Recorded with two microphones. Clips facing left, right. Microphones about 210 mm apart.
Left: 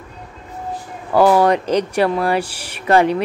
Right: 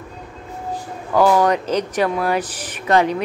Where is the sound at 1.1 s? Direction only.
10° left (ahead or behind).